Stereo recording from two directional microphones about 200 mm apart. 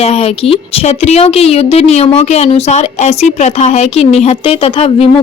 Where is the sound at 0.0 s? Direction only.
30° left (ahead or behind).